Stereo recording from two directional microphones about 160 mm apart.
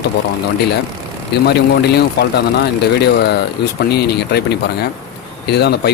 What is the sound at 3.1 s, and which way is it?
Speech, 90° left.